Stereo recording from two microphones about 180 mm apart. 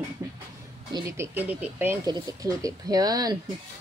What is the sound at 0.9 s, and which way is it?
Speech, 15° right (ahead or behind).